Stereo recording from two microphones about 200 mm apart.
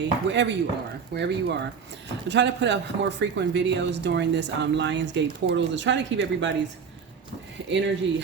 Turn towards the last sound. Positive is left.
turn(degrees=-65)  # may be behind; listen again after turning